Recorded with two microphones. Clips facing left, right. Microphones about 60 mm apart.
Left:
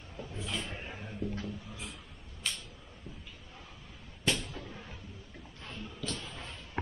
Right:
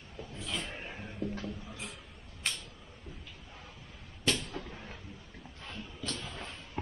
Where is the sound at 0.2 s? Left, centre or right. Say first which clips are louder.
Left 1 dB; centre.